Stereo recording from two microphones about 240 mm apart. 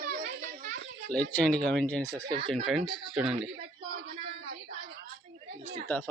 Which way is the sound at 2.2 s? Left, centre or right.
Centre.